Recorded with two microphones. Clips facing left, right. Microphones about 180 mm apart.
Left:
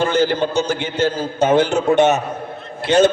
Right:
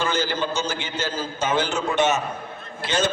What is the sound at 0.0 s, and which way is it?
A man's voice, 60° left (ahead or behind).